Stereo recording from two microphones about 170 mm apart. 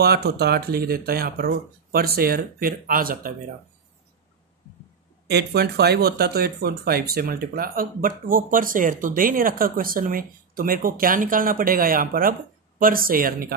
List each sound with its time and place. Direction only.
0.0 s speech: 70° right (ahead or behind)
5.3 s speech: 75° right (ahead or behind)